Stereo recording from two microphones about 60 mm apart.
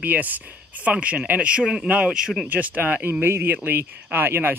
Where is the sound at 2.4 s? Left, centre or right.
Right.